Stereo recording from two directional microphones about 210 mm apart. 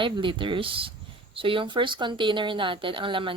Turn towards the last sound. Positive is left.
turn(degrees=-25)  # may be behind; listen again after turning